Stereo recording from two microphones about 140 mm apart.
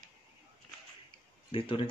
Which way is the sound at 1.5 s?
40° left (ahead or behind).